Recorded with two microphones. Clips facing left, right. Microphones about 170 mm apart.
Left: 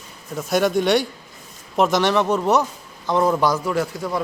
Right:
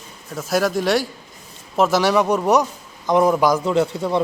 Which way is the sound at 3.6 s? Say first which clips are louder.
Right 4 dB; 25° right (ahead or behind).